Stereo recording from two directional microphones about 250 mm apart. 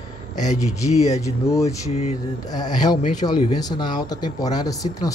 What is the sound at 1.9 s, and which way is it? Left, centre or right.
Speech, left.